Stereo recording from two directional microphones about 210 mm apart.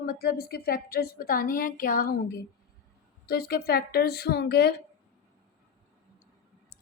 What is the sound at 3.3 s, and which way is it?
A woman's voice, 45° left (ahead or behind).